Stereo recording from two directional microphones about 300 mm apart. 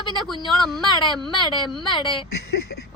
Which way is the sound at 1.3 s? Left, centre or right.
Centre.